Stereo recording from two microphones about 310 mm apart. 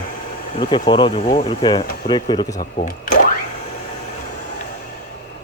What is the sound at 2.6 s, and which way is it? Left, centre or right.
Speech, left.